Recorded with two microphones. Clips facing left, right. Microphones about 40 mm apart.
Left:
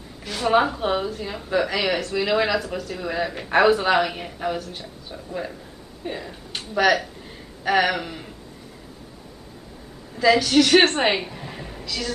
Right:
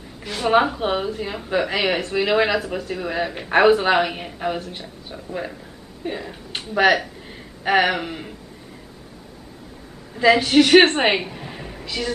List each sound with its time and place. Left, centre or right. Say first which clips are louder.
0.2 s speech: right 2 dB; centre
7.6 s a sound: right 2 dB; right
10.1 s a woman's voice: right 2 dB; right
11.8 s speech: right 3 dB; right